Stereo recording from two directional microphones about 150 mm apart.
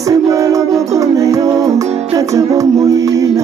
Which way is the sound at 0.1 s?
20° right (ahead or behind).